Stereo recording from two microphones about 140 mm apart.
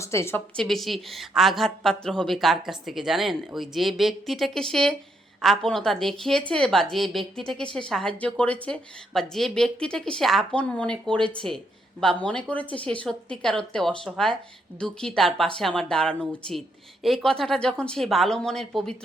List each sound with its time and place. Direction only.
0.0 s a woman's voice: 20° left (ahead or behind)
0.5 s a woman's voice: 5° left (ahead or behind)